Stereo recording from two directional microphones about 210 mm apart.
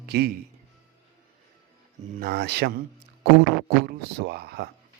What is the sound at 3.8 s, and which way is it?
Speech, 50° right (ahead or behind).